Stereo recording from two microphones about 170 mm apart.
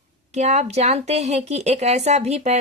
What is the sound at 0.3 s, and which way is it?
Speech, 40° right (ahead or behind).